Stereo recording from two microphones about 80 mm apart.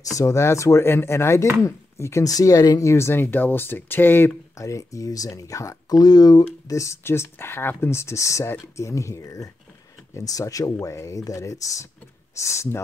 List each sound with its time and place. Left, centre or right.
0.0 s speech: left
1.6 s chopping: left
2.2 s speech: left
2.9 s speech: left
4.6 s speech: left
6.8 s speech: left